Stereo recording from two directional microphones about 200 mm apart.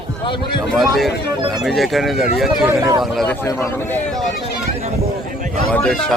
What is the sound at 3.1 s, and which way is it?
Speech, 5° left (ahead or behind).